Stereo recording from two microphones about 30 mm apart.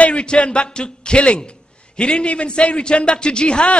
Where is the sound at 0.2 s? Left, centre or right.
Left.